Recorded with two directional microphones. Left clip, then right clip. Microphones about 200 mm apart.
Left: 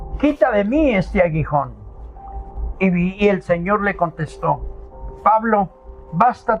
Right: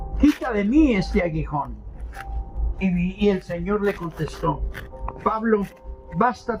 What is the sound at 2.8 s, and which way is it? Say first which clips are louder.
Speech: left 6 dB; 60° left (ahead or behind).